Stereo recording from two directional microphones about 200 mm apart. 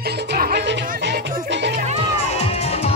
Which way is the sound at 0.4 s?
50° right (ahead or behind).